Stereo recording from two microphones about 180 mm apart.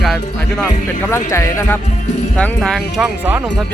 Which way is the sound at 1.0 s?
15° left (ahead or behind).